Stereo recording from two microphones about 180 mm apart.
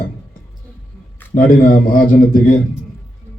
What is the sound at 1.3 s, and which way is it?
A man's voice, 50° left (ahead or behind).